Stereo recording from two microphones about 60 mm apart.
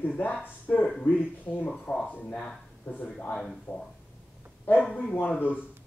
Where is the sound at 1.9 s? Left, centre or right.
Centre.